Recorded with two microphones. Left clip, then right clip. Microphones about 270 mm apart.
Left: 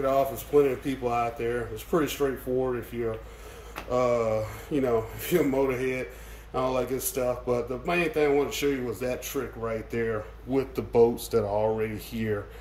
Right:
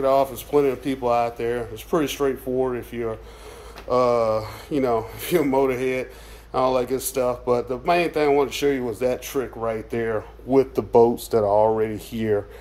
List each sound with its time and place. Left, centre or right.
0.0 s speech: centre